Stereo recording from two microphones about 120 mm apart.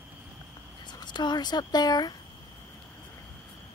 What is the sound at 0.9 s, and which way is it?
Speech, 40° left (ahead or behind).